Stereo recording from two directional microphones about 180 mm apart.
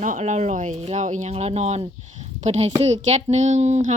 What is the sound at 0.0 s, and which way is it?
Speech, 40° right (ahead or behind).